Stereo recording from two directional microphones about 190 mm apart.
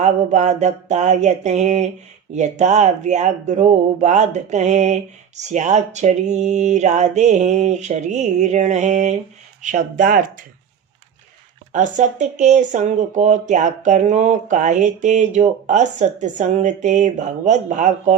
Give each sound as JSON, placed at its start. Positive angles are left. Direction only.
{"t": 0.0, "sound": "speech", "side_deg": -40}
{"t": 11.7, "sound": "speech", "side_deg": -40}